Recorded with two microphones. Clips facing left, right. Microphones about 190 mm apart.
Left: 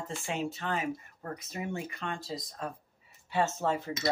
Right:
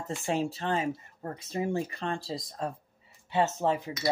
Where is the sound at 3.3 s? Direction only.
20° right (ahead or behind).